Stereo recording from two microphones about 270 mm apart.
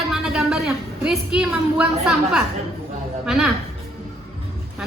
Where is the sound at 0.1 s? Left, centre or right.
Centre.